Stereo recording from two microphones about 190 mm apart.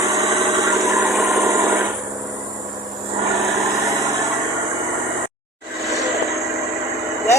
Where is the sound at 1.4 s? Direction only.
15° right (ahead or behind).